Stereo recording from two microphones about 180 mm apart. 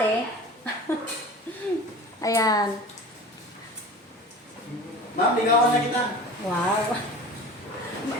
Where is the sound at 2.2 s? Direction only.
20° left (ahead or behind).